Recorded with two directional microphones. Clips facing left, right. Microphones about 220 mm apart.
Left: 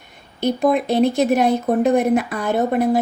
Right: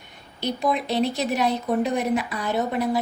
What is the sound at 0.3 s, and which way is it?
Speech, 50° left (ahead or behind).